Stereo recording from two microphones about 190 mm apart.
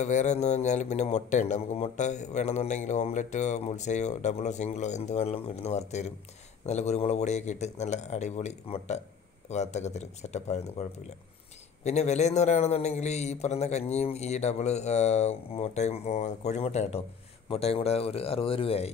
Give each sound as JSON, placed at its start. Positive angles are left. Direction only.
{"t": 0.0, "sound": "speech", "side_deg": 40}